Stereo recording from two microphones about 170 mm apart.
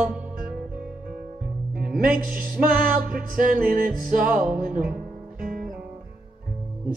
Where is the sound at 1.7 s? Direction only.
60° right (ahead or behind).